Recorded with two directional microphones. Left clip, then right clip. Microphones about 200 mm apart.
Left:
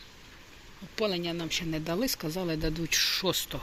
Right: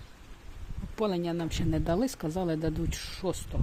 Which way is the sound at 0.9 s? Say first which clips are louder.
Even; 30° right (ahead or behind).